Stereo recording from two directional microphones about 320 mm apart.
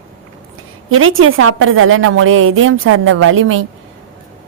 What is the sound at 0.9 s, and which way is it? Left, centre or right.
A woman's voice, right.